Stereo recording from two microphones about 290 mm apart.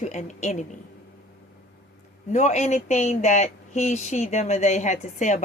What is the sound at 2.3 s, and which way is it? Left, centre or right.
Speech, left.